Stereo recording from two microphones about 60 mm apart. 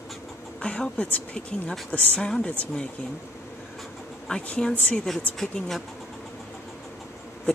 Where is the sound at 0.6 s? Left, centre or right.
Centre.